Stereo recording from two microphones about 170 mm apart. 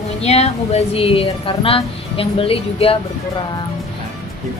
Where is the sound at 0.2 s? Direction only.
40° left (ahead or behind).